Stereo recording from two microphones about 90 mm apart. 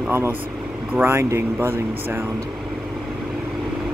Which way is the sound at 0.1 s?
25° right (ahead or behind).